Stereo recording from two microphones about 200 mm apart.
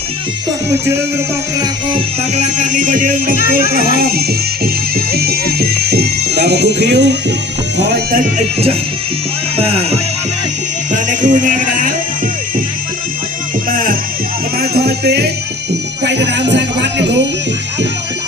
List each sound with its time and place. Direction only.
1.9 s music: 35° right (ahead or behind)
3.7 s speech: 50° right (ahead or behind)
9.6 s music: 30° right (ahead or behind)
13.7 s music: 45° right (ahead or behind)
14.6 s speech: 50° right (ahead or behind)